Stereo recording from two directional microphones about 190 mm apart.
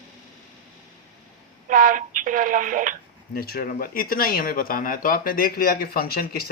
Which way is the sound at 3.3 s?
55° left (ahead or behind).